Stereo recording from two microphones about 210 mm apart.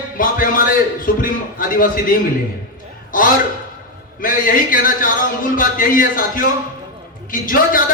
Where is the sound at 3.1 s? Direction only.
40° left (ahead or behind).